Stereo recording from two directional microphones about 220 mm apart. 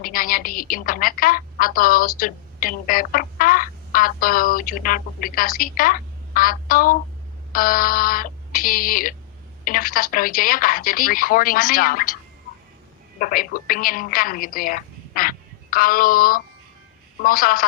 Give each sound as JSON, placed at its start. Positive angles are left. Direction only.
{"t": 0.0, "sound": "a woman's voice", "side_deg": 40}
{"t": 13.1, "sound": "a woman's voice", "side_deg": 40}